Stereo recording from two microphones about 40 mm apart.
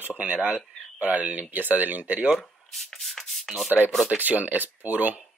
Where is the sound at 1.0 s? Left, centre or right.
Right.